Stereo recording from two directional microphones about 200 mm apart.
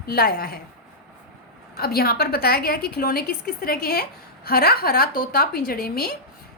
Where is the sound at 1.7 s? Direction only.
50° left (ahead or behind).